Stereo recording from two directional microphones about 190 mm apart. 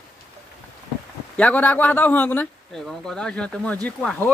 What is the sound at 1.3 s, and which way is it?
Speech, 10° left (ahead or behind).